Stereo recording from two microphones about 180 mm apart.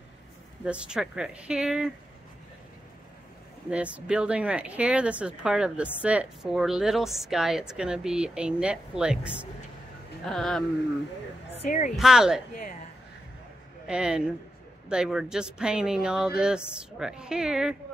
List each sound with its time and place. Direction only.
0.7 s speech: 5° right (ahead or behind)
3.7 s speech: 5° right (ahead or behind)
11.5 s speech: 40° left (ahead or behind)
11.9 s speech: 5° right (ahead or behind)
13.8 s speech: 5° right (ahead or behind)